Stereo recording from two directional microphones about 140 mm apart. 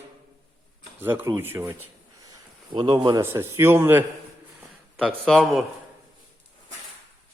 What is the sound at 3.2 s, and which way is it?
Speech, 20° right (ahead or behind).